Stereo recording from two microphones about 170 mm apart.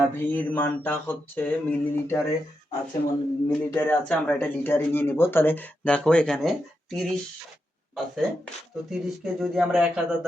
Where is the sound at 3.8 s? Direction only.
10° left (ahead or behind).